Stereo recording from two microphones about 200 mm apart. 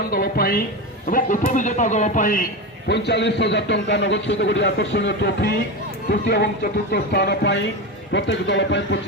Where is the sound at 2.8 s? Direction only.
60° left (ahead or behind).